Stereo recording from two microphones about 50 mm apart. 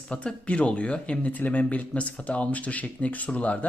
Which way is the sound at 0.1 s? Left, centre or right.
Left.